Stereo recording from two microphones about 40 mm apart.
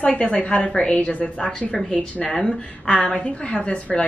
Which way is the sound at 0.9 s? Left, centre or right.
Left.